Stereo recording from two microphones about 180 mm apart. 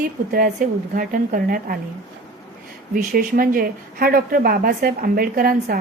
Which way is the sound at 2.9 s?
50° right (ahead or behind).